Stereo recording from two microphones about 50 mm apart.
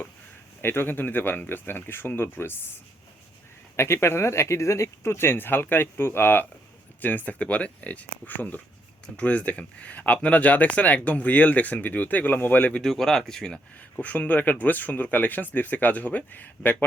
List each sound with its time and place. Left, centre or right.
0.6 s speech: left
3.8 s speech: left
12.8 s speech: centre
14.0 s speech: left